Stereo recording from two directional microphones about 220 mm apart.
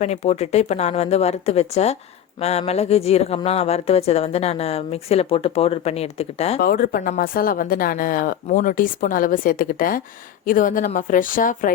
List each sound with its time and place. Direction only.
0.0 s speech: 30° left (ahead or behind)
6.6 s speech: 40° left (ahead or behind)